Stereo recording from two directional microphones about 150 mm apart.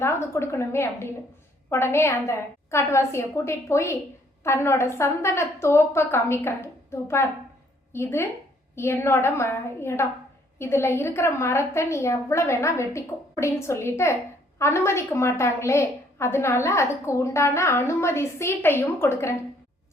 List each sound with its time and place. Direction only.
0.0 s a woman's voice: 15° left (ahead or behind)